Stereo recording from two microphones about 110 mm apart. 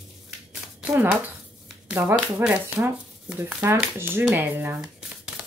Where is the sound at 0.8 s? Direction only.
15° right (ahead or behind).